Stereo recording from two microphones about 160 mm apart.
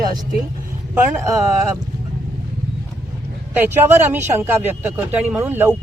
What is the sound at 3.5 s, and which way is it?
A man's voice, 15° right (ahead or behind).